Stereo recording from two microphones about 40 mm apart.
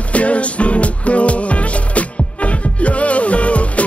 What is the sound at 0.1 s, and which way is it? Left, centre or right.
Music, left.